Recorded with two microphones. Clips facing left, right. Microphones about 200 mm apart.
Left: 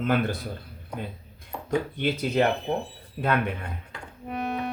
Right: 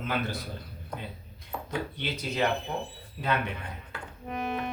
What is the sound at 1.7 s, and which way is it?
Speech, 50° left (ahead or behind).